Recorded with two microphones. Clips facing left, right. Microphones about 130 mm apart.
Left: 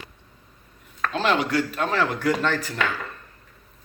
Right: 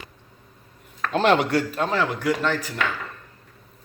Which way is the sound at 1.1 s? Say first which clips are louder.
Right 3 dB; 55° right (ahead or behind).